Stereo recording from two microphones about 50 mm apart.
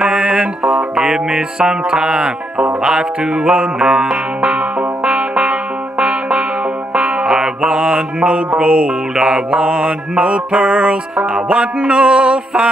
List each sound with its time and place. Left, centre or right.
0.0 s music: centre
2.8 s mantra: centre
4.4 s music: right
8.5 s mantra: centre
11.4 s music: right
11.8 s mantra: centre